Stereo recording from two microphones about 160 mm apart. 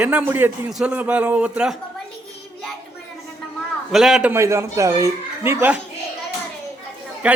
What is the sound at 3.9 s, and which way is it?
Speech, centre (ahead or behind).